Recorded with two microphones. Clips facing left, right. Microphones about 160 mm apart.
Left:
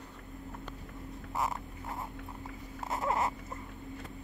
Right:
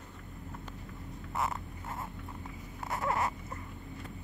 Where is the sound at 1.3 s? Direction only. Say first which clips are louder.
Even; 15° left (ahead or behind).